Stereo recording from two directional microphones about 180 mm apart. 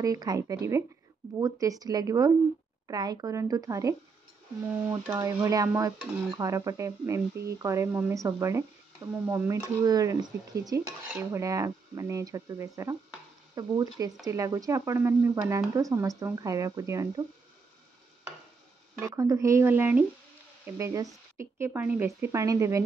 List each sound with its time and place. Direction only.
0.0 s stir: 20° right (ahead or behind)
7.4 s speech: 15° right (ahead or behind)
13.6 s stir: 20° right (ahead or behind)
14.2 s speech: 20° right (ahead or behind)
18.9 s speech: 20° right (ahead or behind)